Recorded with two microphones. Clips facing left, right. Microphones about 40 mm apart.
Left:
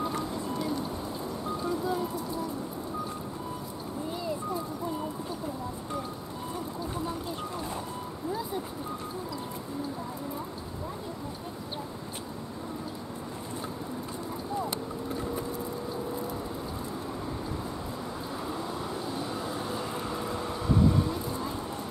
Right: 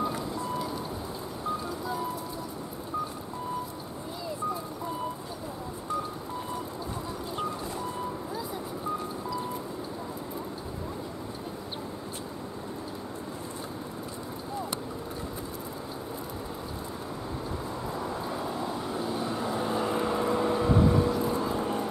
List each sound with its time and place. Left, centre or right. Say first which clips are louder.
0.0 s music: right 1 dB; centre
19.5 s vehicle: right 5 dB; right